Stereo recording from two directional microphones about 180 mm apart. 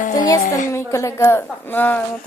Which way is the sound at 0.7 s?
15° left (ahead or behind).